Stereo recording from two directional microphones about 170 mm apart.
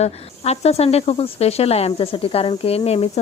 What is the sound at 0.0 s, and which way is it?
Speech, 40° left (ahead or behind).